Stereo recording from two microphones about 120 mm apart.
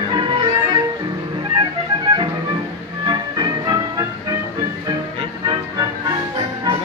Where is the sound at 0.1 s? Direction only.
40° right (ahead or behind).